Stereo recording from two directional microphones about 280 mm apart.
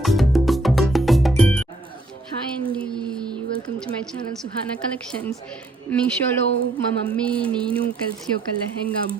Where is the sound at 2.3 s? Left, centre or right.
Right.